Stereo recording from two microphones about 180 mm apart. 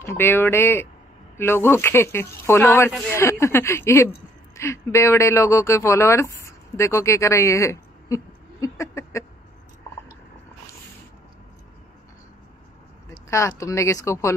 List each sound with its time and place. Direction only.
0.0 s speech: 15° left (ahead or behind)
13.3 s speech: 15° left (ahead or behind)